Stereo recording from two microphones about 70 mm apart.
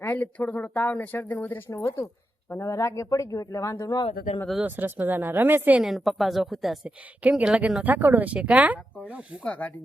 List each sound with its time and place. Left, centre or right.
0.0 s speech: left
1.7 s speech: left
4.6 s speech: right
5.8 s speech: centre
7.2 s speech: centre
7.9 s speech: right
9.4 s speech: left